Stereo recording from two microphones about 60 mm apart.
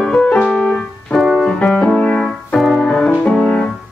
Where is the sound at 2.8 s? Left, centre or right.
Centre.